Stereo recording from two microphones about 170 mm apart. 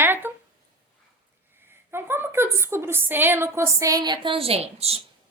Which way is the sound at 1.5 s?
15° right (ahead or behind).